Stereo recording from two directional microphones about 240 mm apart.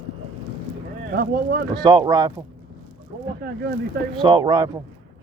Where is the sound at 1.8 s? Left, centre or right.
Centre.